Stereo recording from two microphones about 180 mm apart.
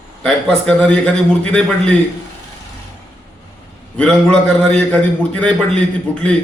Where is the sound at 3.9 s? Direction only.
5° left (ahead or behind).